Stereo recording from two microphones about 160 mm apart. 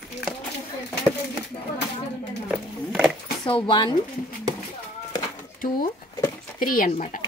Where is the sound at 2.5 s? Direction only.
5° right (ahead or behind).